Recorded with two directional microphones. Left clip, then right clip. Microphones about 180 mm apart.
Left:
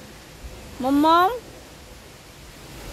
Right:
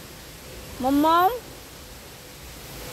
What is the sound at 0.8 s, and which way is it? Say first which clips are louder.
Speech: left 2 dB; 20° left (ahead or behind).